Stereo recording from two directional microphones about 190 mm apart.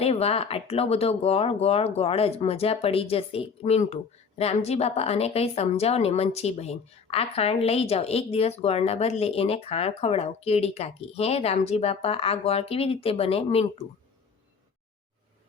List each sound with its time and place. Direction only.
0.0 s a woman's voice: 30° left (ahead or behind)